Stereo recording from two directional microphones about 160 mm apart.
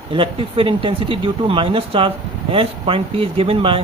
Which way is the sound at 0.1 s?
35° right (ahead or behind).